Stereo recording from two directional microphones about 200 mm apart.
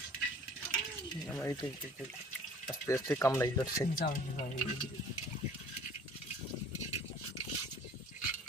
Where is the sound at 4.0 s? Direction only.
45° left (ahead or behind).